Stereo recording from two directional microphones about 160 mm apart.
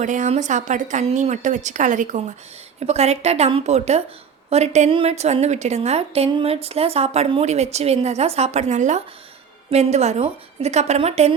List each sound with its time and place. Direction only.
0.0 s a woman's voice: 50° right (ahead or behind)